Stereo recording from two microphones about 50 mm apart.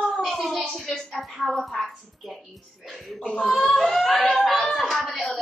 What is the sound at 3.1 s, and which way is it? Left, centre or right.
A woman's voice, centre.